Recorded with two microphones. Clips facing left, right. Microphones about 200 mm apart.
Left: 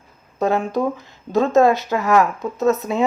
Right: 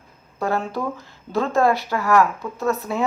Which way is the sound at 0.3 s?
20° left (ahead or behind).